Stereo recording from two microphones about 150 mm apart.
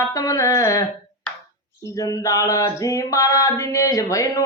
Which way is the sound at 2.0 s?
25° left (ahead or behind).